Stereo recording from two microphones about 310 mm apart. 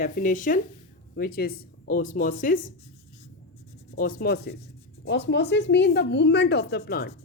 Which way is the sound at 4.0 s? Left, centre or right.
Left.